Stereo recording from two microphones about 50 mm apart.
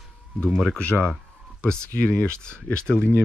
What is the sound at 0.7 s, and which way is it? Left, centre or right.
Speech, left.